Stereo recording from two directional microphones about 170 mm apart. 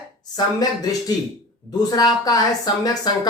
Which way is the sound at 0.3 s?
20° left (ahead or behind).